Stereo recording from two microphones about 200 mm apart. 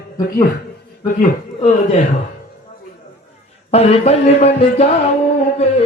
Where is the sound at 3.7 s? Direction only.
30° left (ahead or behind).